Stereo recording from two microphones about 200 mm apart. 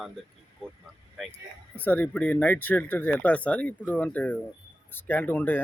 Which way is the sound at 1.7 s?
10° left (ahead or behind).